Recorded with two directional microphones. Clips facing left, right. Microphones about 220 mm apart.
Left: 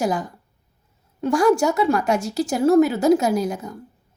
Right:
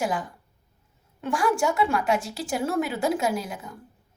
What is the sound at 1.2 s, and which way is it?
A woman's voice, 40° left (ahead or behind).